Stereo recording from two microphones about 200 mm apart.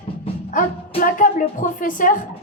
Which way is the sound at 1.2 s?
40° left (ahead or behind).